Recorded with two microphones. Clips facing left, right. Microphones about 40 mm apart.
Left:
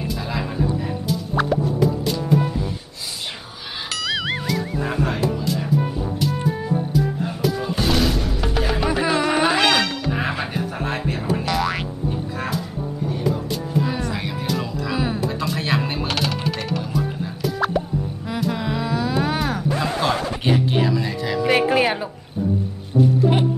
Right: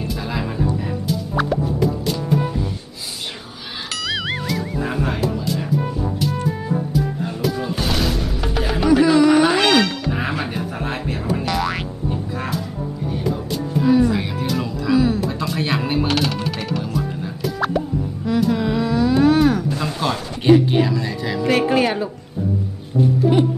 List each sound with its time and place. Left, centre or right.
0.3 s speech: centre
1.3 s music: centre
3.9 s music: centre
9.0 s music: centre
15.0 s music: centre
15.2 s music: centre
20.0 s speech: centre
21.6 s speech: centre
23.3 s music: left